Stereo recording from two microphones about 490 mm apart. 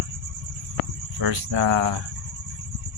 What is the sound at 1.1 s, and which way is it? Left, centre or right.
Speech, right.